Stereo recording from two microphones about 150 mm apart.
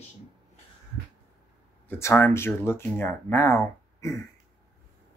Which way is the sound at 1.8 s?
15° left (ahead or behind).